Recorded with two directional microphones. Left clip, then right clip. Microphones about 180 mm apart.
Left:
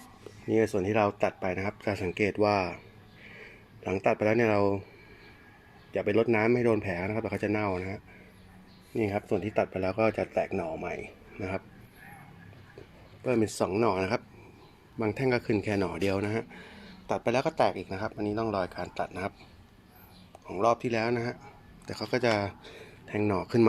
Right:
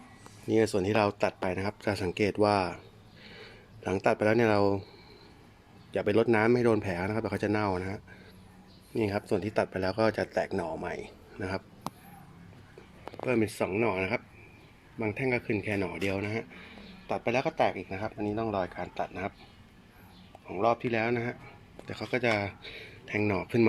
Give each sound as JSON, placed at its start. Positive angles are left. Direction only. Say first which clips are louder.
{"t": 0.4, "sound": "speech", "louder": "even", "side_deg": 0}
{"t": 5.9, "sound": "speech", "louder": "even", "side_deg": -5}
{"t": 13.2, "sound": "a man's voice", "louder": "left 1 dB", "side_deg": 15}
{"t": 20.5, "sound": "a man's voice", "louder": "left 1 dB", "side_deg": 10}